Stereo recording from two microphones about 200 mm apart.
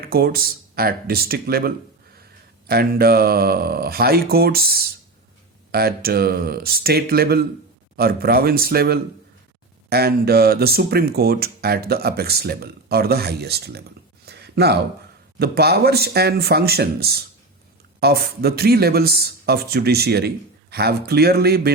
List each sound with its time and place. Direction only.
0.0 s speech: 50° right (ahead or behind)
14.3 s a sound: 55° right (ahead or behind)
15.4 s speech: 55° right (ahead or behind)